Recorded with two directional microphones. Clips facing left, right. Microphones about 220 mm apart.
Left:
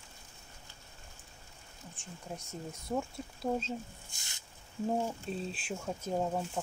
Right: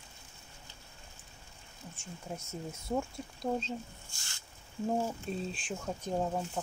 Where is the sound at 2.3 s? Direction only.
5° right (ahead or behind).